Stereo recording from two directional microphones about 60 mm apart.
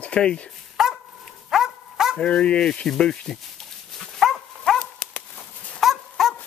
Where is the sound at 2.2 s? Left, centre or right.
Centre.